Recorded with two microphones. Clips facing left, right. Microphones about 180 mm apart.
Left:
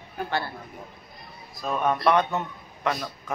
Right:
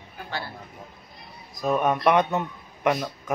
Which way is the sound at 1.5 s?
15° right (ahead or behind).